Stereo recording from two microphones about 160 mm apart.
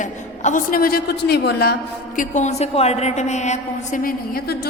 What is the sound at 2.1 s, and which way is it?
A woman's voice, 50° left (ahead or behind).